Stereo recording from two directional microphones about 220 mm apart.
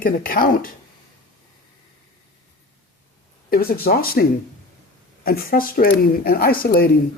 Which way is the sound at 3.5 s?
45° left (ahead or behind).